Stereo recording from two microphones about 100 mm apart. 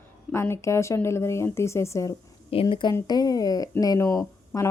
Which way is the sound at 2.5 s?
60° left (ahead or behind).